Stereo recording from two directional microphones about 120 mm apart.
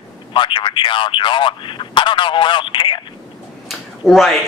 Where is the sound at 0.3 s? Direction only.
40° left (ahead or behind).